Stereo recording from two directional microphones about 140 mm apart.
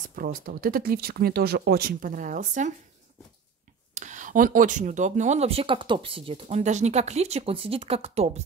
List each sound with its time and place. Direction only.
0.1 s speech: 90° right; by 2.7 s 65° right (ahead or behind)
3.9 s speech: 60° right (ahead or behind)